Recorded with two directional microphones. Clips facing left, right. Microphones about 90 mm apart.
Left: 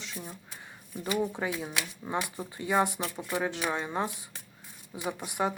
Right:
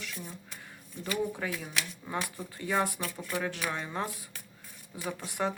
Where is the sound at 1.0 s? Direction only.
20° left (ahead or behind).